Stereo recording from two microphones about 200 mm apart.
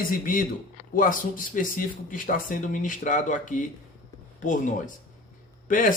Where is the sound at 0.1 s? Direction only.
45° left (ahead or behind).